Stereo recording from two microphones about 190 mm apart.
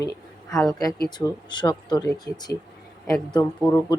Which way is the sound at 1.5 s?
25° left (ahead or behind).